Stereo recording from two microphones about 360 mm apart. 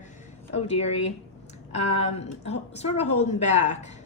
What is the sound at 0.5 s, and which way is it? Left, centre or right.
Speech, centre.